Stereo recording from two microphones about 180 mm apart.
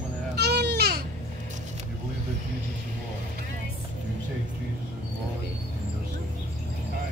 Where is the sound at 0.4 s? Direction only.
65° right (ahead or behind).